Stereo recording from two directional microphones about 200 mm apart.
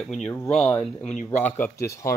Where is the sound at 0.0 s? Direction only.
Centre (ahead or behind).